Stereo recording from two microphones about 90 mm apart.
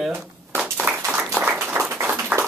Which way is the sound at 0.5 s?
15° right (ahead or behind).